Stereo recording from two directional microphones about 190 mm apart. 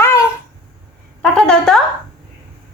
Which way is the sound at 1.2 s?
5° left (ahead or behind).